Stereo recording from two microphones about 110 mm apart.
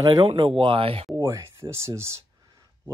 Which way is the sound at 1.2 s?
30° right (ahead or behind).